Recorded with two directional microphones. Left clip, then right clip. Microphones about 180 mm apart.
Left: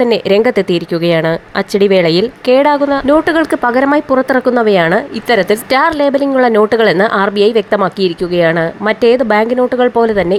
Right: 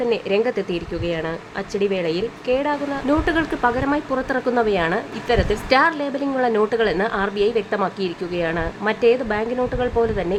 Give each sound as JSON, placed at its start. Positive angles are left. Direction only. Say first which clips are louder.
{"t": 0.1, "sound": "speech", "louder": "left 10 dB", "side_deg": 45}